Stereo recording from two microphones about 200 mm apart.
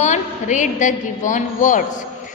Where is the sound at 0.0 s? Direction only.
35° left (ahead or behind).